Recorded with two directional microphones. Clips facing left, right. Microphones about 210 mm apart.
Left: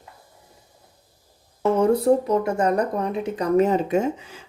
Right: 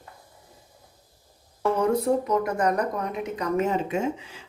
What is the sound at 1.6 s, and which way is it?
Speech, 25° left (ahead or behind).